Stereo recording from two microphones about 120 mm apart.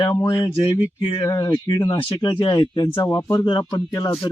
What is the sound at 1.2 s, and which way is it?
Speech, 25° left (ahead or behind).